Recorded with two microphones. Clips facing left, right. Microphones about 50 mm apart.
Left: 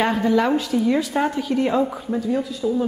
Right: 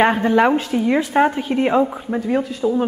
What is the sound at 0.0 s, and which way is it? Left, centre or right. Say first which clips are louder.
A woman's voice: right 4 dB; right.